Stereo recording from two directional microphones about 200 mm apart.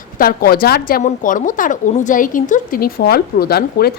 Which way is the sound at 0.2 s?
50° left (ahead or behind).